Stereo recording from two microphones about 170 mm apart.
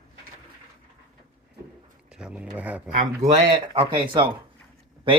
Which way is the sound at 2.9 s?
40° right (ahead or behind).